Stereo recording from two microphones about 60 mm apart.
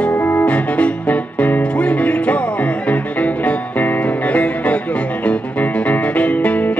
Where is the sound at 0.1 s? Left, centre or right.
Left.